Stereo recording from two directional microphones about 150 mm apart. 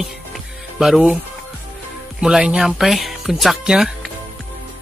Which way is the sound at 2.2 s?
5° right (ahead or behind).